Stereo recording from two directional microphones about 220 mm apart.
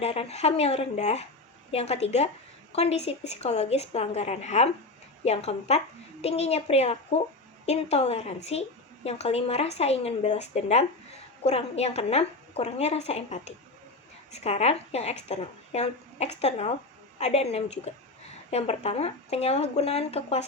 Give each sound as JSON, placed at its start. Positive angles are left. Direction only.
{"t": 0.0, "sound": "speech", "side_deg": 30}